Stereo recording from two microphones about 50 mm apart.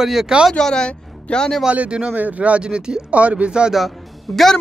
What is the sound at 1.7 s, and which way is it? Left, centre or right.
Speech, right.